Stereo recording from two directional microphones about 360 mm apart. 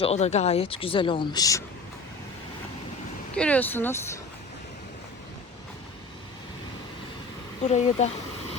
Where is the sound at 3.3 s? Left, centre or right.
Centre.